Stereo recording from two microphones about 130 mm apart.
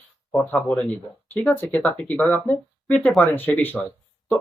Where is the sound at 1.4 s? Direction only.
15° left (ahead or behind).